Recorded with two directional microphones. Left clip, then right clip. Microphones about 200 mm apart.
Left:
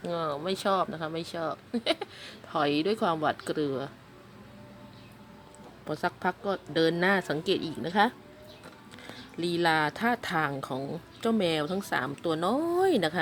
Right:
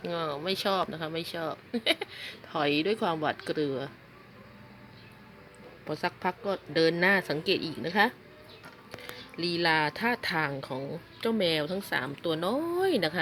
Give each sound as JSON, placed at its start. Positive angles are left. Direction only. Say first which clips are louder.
{"t": 0.0, "sound": "speech", "louder": "left 1 dB", "side_deg": 0}
{"t": 5.9, "sound": "speech", "louder": "left 1 dB", "side_deg": 0}